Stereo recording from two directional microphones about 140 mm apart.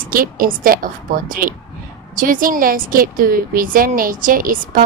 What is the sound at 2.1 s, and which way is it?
A woman's voice, 80° right.